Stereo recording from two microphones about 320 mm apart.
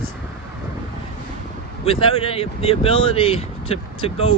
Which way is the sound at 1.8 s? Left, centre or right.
Centre.